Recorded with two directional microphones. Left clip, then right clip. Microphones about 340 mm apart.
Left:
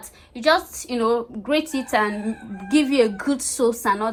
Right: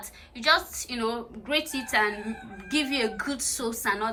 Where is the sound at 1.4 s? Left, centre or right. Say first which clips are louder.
Left 5 dB; centre.